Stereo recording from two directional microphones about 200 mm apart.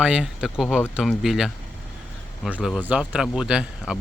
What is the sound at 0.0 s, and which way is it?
Speech, 5° right (ahead or behind).